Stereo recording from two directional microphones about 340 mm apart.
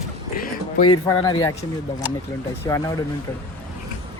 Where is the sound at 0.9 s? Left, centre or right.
Centre.